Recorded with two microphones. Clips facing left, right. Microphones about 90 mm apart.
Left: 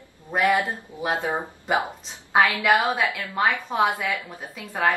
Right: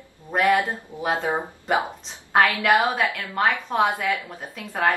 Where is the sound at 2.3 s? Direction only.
Centre (ahead or behind).